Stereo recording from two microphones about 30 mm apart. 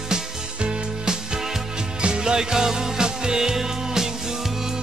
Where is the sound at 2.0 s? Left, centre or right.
Right.